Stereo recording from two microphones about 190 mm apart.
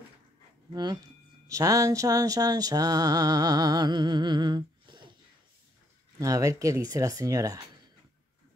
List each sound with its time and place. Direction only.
0.7 s speech: 20° right (ahead or behind)
6.1 s speech: 15° right (ahead or behind)